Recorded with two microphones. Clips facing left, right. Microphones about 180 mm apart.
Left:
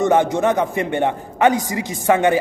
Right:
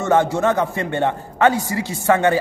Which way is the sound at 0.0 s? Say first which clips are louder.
Left 1 dB; 15° left (ahead or behind).